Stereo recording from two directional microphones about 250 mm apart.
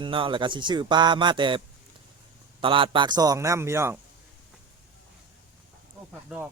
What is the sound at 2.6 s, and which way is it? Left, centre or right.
Speech, centre.